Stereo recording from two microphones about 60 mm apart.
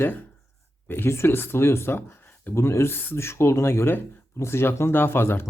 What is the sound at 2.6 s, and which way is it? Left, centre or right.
Speech, left.